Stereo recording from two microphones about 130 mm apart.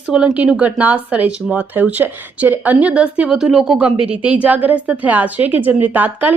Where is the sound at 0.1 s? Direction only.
10° right (ahead or behind).